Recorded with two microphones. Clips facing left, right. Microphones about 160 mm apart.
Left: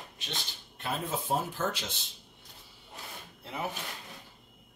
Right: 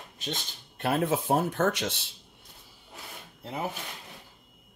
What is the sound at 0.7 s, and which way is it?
Speech, 65° right (ahead or behind).